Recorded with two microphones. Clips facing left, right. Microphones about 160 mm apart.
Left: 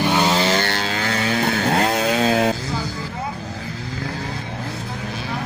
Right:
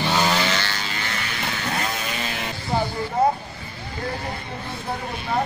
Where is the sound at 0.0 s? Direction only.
15° left (ahead or behind).